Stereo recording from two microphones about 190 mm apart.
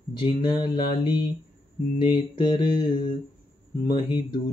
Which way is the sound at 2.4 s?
25° left (ahead or behind).